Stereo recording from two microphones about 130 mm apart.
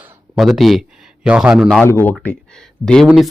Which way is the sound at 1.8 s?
15° left (ahead or behind).